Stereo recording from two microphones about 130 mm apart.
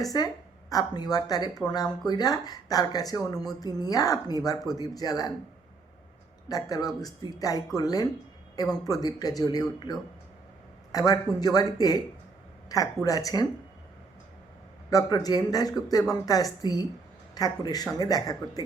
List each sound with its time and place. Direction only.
0.1 s a woman's voice: 30° left (ahead or behind)
6.5 s speech: 30° left (ahead or behind)
14.8 s speech: 30° left (ahead or behind)